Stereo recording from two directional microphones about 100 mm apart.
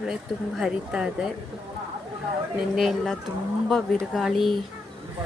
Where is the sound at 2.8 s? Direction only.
Centre (ahead or behind).